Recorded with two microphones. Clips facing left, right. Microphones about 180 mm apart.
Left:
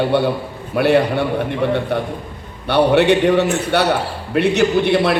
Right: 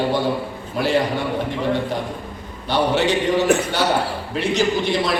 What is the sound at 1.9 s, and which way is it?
A man's voice, 60° left (ahead or behind).